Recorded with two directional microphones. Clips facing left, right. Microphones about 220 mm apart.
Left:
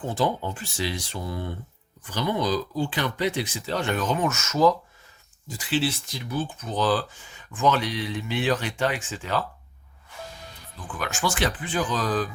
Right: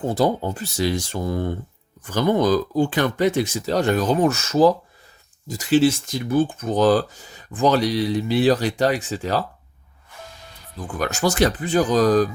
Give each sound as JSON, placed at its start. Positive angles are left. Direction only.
{"t": 0.0, "sound": "speech", "side_deg": -40}
{"t": 10.8, "sound": "speech", "side_deg": -40}